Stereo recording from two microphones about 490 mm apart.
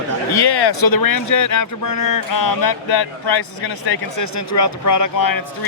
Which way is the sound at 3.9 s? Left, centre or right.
Left.